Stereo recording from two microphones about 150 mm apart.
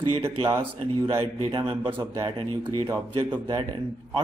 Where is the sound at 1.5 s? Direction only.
35° right (ahead or behind).